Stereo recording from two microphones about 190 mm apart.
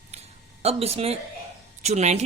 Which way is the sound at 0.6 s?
30° right (ahead or behind).